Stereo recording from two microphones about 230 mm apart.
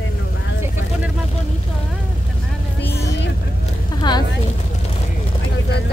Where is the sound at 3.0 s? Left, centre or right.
Left.